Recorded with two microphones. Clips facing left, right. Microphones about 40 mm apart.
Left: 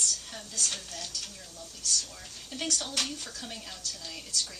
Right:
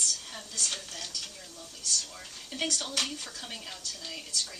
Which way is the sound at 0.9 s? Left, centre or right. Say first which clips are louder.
Even; centre.